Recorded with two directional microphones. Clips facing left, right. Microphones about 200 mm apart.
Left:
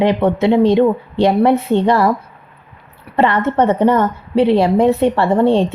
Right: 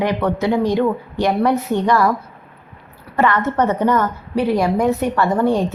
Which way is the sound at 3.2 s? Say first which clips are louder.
Left 3 dB; 30° left (ahead or behind).